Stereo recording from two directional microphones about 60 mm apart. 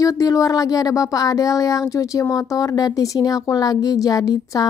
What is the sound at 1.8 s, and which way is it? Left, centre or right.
Speech, left.